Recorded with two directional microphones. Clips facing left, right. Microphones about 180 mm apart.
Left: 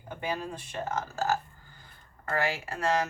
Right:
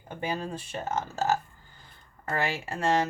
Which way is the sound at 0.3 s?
25° right (ahead or behind).